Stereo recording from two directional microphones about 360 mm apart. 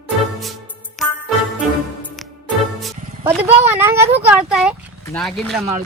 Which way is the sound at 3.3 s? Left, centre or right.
Centre.